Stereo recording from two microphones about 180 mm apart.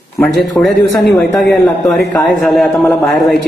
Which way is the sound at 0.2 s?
5° left (ahead or behind).